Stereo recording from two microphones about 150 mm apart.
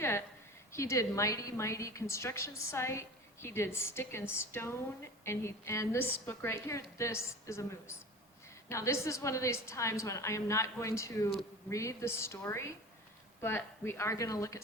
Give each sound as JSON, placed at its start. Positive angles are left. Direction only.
{"t": 0.7, "sound": "a woman's voice", "side_deg": 20}